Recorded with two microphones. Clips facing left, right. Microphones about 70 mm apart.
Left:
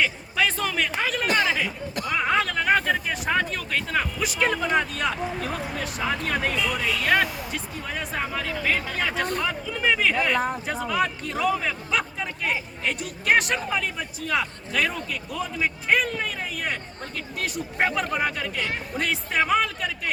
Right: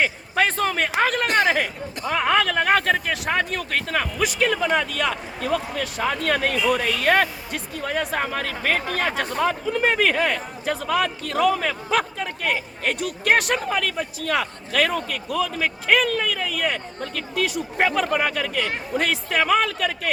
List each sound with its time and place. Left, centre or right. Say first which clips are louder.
0.0 s a man's voice: right 3 dB; right
2.1 s speech: right 4 dB; right
4.6 s a man's voice: right 2 dB; right
6.8 s a man's voice: right 3 dB; right